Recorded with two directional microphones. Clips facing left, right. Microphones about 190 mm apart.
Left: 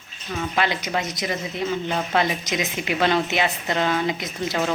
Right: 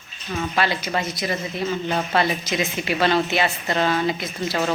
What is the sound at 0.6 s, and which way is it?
Speech, 20° left (ahead or behind).